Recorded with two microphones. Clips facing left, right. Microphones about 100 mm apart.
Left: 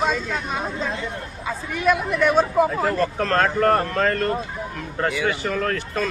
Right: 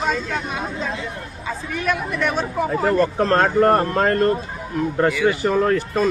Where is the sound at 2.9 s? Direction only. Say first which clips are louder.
Right 4 dB; 30° right (ahead or behind).